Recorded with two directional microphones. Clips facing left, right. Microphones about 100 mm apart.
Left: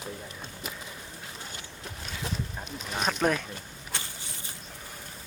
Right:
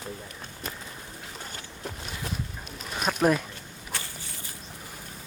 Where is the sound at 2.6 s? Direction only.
Centre (ahead or behind).